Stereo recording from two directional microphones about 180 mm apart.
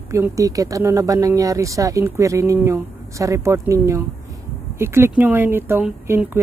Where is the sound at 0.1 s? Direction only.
15° right (ahead or behind).